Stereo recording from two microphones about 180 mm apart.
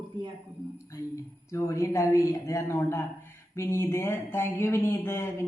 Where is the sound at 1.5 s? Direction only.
15° left (ahead or behind).